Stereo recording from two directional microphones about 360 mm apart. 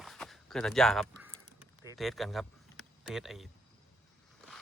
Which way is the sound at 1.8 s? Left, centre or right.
Centre.